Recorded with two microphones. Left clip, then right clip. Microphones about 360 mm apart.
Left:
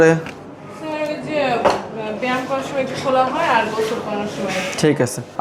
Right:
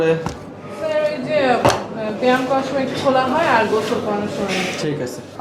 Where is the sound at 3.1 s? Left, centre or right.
Centre.